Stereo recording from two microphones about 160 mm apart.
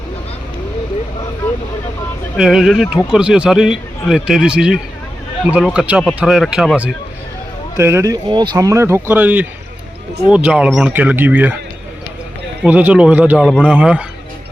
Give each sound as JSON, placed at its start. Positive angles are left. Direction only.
{"t": 2.3, "sound": "a man's voice", "side_deg": -5}
{"t": 7.8, "sound": "speech", "side_deg": -15}
{"t": 12.6, "sound": "speech", "side_deg": -10}
{"t": 13.4, "sound": "a man's voice", "side_deg": 5}
{"t": 13.7, "sound": "speech", "side_deg": -10}